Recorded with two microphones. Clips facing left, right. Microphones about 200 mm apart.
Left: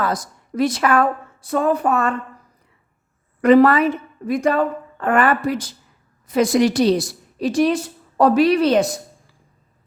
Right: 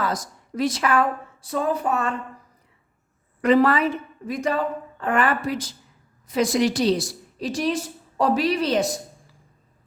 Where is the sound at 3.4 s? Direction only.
55° left (ahead or behind).